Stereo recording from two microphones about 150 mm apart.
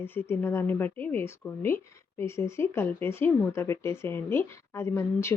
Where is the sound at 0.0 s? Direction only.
15° left (ahead or behind).